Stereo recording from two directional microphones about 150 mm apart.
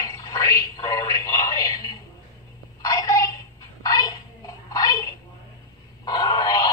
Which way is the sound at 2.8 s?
25° left (ahead or behind).